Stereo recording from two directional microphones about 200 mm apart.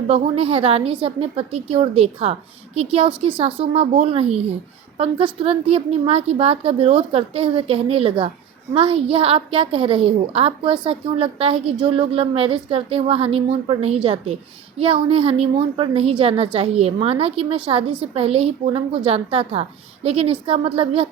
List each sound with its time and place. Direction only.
0.1 s a woman's voice: 30° right (ahead or behind)